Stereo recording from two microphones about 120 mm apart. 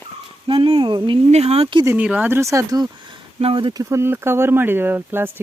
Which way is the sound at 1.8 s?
15° right (ahead or behind).